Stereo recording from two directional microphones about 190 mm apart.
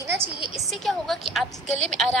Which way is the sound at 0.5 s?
Centre (ahead or behind).